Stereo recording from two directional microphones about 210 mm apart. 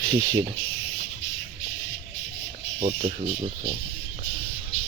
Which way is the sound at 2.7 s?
30° right (ahead or behind).